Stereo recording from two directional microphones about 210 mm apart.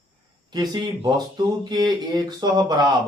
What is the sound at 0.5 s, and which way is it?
Speech, 20° right (ahead or behind).